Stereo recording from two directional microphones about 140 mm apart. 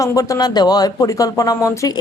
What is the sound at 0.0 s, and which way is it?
A woman's voice, 25° left (ahead or behind).